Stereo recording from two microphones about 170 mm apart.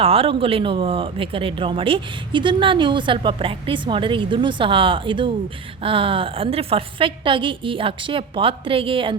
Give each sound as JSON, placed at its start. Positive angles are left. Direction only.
{"t": 0.0, "sound": "speech", "side_deg": -35}